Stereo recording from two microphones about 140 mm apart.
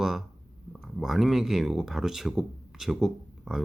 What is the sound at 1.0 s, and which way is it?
Speech, centre (ahead or behind).